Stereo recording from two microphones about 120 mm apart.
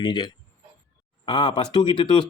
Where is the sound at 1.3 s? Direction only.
45° left (ahead or behind).